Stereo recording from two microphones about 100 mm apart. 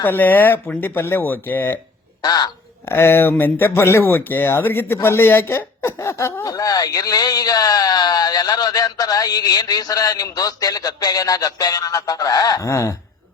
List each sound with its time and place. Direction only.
0.0 s speech: 20° left (ahead or behind)
2.2 s speech: 40° left (ahead or behind)
2.8 s speech: 25° left (ahead or behind)